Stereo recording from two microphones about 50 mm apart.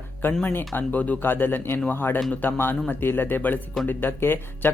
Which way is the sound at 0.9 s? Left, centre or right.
Left.